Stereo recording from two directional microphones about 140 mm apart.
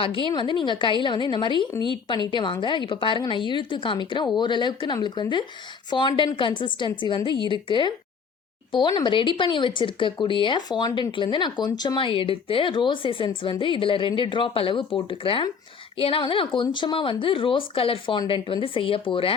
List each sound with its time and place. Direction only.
0.0 s speech: 40° left (ahead or behind)